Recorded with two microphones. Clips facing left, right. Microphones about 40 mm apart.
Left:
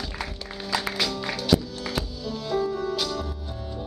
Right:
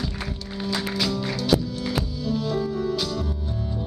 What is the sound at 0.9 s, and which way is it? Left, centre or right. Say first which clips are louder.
Music: right 2 dB; centre.